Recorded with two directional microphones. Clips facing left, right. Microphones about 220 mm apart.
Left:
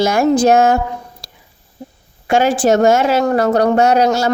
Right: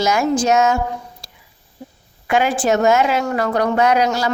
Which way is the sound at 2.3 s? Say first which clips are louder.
Left 4 dB; 30° left (ahead or behind).